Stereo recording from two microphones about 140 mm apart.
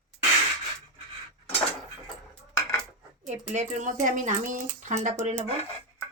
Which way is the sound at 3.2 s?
60° right (ahead or behind).